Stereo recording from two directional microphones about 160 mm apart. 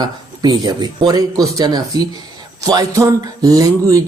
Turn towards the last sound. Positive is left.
turn(degrees=-20)  # may be behind; listen again after turning